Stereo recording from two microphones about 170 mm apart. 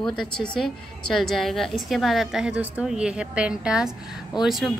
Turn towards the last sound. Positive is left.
turn(degrees=0)  # may be behind; listen again after turning